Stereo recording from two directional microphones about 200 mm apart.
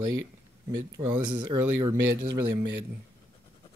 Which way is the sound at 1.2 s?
20° right (ahead or behind).